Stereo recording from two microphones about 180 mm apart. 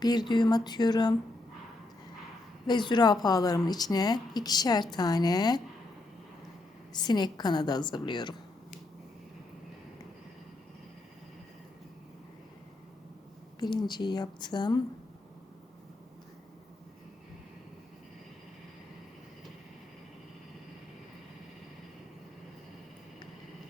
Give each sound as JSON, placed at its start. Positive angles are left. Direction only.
{"t": 0.0, "sound": "a woman's voice", "side_deg": 25}
{"t": 2.6, "sound": "a woman's voice", "side_deg": 25}
{"t": 6.9, "sound": "a woman's voice", "side_deg": 25}
{"t": 13.6, "sound": "a woman's voice", "side_deg": 25}